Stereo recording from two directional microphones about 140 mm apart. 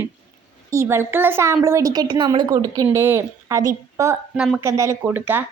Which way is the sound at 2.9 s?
15° right (ahead or behind).